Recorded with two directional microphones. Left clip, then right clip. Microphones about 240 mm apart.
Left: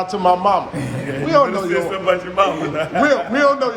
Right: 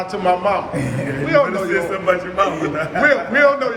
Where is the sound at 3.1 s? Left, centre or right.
Centre.